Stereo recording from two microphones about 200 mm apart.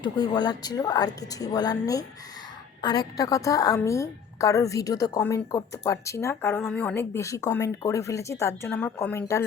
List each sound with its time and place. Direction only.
0.0 s a woman's voice: 20° left (ahead or behind)